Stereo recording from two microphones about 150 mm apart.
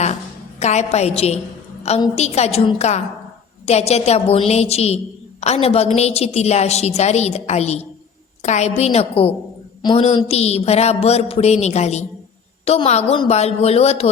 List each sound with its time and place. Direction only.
0.6 s a woman's voice: 50° left (ahead or behind)